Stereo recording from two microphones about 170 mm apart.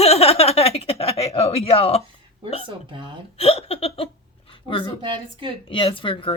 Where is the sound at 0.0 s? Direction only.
35° left (ahead or behind).